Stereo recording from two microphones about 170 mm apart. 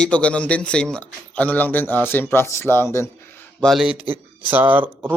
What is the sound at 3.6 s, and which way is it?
Speech, centre (ahead or behind).